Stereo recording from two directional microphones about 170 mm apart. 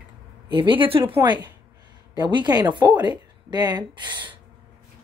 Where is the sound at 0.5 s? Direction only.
30° right (ahead or behind).